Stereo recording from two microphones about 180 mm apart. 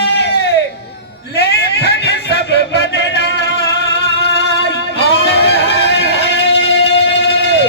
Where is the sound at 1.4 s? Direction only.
70° left (ahead or behind).